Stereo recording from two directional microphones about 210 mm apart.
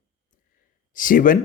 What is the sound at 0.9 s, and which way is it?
Speech, 40° left (ahead or behind).